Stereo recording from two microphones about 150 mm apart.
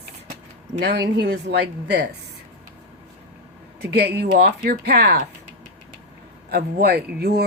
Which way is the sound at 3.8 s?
90° right.